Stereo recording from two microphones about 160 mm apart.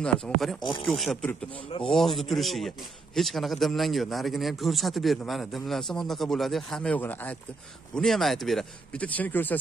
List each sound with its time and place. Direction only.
0.0 s a man's voice: centre (ahead or behind)
1.5 s speech: 35° left (ahead or behind)
1.9 s a man's voice: centre (ahead or behind)